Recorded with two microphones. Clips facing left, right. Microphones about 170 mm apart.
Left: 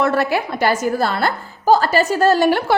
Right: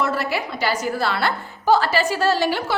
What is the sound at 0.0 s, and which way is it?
A woman's voice, 55° left (ahead or behind).